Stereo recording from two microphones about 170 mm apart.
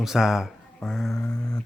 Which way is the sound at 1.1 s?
20° left (ahead or behind).